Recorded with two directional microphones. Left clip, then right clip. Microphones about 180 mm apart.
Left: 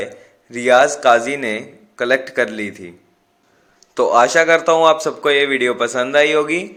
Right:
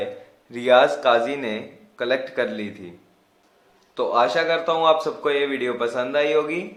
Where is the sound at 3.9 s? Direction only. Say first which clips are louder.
Left 7 dB; 40° left (ahead or behind).